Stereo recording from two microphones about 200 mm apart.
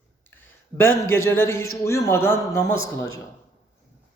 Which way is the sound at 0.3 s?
10° left (ahead or behind).